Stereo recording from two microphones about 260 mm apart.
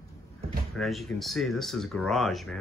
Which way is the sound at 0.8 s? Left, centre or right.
Centre.